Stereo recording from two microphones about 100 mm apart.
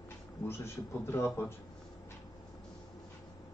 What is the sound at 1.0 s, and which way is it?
Speech, 25° left (ahead or behind).